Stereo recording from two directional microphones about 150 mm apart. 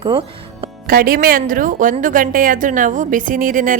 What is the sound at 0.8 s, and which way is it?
A woman's voice, 80° right.